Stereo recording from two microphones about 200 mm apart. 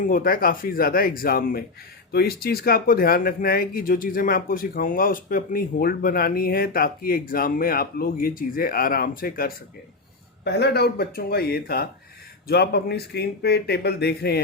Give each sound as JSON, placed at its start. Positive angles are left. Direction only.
{"t": 0.0, "sound": "speech", "side_deg": 45}